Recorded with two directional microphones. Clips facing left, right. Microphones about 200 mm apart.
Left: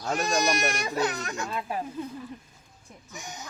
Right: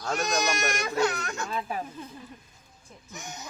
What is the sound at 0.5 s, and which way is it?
Speech, 15° left (ahead or behind).